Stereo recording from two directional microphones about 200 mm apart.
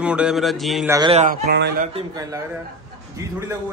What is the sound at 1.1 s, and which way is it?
Speech, 40° right (ahead or behind).